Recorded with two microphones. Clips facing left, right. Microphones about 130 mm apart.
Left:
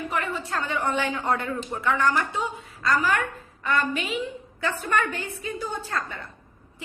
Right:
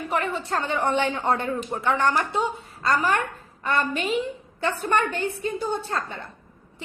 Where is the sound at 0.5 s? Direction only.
30° right (ahead or behind).